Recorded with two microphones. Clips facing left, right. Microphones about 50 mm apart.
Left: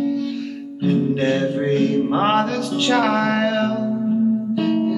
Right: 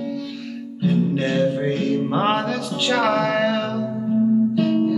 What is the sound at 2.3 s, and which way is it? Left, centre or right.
Music, centre.